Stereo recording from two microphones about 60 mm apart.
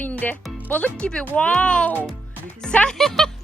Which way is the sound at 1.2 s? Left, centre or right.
Left.